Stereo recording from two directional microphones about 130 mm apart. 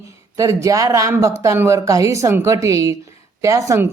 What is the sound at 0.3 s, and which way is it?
Speech, 25° right (ahead or behind).